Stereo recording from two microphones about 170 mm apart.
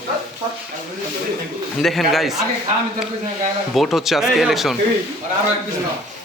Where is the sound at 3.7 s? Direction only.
Centre (ahead or behind).